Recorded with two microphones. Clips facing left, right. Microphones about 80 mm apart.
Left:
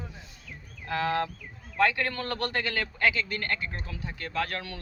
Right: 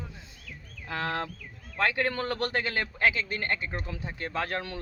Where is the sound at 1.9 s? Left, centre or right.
Centre.